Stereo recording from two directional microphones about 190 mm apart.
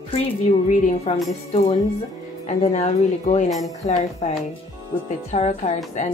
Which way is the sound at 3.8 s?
35° left (ahead or behind).